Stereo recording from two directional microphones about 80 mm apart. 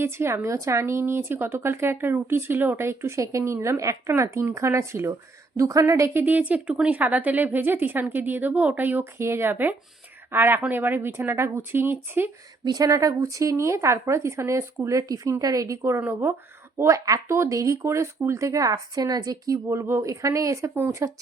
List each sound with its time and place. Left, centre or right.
0.0 s speech: right
5.5 s speech: right
6.2 s speech: right
12.6 s speech: right
16.0 s speech: right
16.7 s speech: right